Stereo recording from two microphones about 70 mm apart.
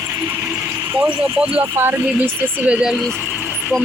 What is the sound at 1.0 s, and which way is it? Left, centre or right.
Speech, centre.